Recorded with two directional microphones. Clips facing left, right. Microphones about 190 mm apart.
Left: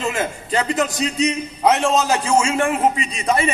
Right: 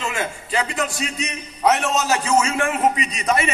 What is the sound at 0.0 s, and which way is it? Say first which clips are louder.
A man's voice: left 3 dB; 40° left (ahead or behind).